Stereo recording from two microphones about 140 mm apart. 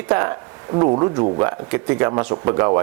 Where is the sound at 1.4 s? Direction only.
15° right (ahead or behind).